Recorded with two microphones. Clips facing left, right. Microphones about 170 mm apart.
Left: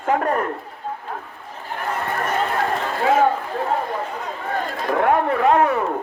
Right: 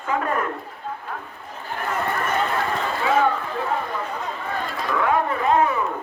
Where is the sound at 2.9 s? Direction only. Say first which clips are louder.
Left 3 dB; 45° left (ahead or behind); by 5.8 s 70° left (ahead or behind).